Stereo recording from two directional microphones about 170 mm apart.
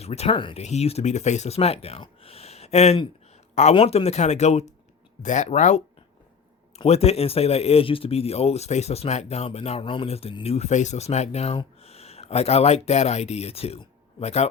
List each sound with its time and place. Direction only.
0.0 s speech: 40° left (ahead or behind)